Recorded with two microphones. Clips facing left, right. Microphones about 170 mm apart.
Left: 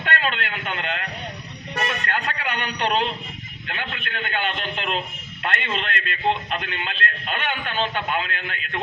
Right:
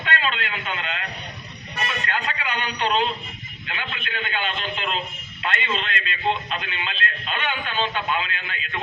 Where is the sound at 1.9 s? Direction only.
55° left (ahead or behind).